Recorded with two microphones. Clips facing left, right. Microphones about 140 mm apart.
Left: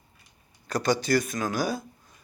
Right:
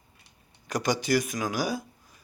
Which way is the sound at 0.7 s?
15° right (ahead or behind).